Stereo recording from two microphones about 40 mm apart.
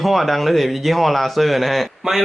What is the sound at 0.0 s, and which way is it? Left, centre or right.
Speech, centre.